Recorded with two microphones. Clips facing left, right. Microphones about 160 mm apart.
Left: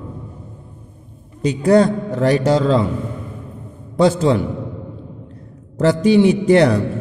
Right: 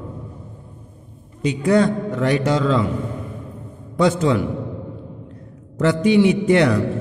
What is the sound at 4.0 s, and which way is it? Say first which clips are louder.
Speech: left 3 dB; 30° left (ahead or behind).